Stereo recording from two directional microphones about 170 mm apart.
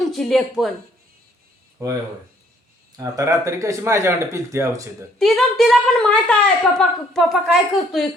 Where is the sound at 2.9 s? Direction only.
20° right (ahead or behind).